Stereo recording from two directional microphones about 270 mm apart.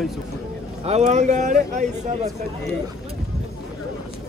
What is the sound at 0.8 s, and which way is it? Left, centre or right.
Speech, right.